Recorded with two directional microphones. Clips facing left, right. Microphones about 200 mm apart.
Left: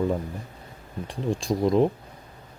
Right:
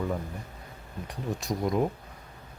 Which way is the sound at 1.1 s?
30° left (ahead or behind).